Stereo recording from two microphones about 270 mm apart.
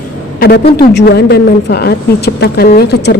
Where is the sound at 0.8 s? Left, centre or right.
Left.